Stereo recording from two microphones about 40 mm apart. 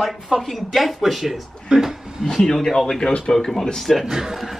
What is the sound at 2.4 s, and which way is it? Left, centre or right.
Speech, centre.